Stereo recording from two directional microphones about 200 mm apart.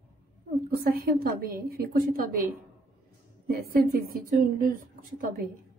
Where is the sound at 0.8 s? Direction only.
45° right (ahead or behind).